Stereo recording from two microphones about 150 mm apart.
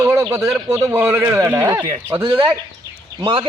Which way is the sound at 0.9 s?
15° right (ahead or behind).